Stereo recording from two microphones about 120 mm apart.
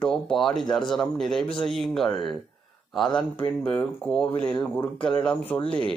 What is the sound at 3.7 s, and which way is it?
Speech, 10° left (ahead or behind).